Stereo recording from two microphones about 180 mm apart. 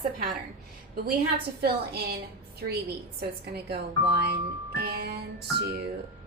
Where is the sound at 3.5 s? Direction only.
60° right (ahead or behind).